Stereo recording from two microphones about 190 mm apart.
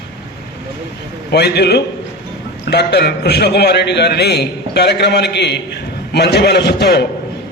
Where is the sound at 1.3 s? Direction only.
60° left (ahead or behind).